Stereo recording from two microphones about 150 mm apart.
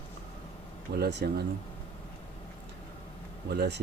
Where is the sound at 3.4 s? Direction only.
90° right.